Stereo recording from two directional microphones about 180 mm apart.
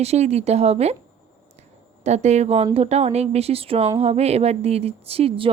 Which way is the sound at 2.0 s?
40° right (ahead or behind).